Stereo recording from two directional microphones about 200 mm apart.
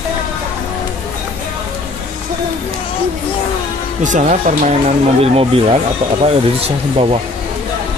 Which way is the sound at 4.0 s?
40° right (ahead or behind).